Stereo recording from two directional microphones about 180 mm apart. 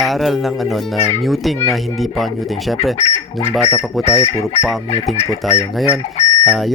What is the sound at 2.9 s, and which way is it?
Speech, 35° left (ahead or behind).